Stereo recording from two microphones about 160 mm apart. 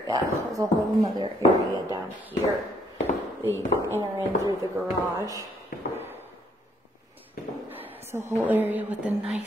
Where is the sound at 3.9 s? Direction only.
20° right (ahead or behind).